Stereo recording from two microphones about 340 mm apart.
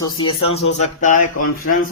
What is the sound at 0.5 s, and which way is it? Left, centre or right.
Speech, centre.